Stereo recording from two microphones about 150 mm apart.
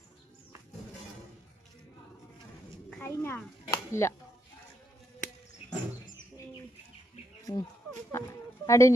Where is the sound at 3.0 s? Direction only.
15° left (ahead or behind).